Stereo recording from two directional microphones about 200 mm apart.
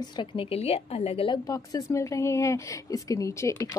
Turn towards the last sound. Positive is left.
turn(degrees=15)  # may be behind; listen again after turning